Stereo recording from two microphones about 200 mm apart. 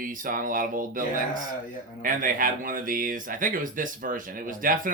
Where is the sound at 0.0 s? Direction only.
45° right (ahead or behind).